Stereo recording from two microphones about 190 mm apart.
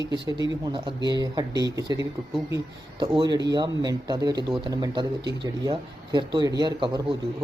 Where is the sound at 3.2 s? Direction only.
20° right (ahead or behind).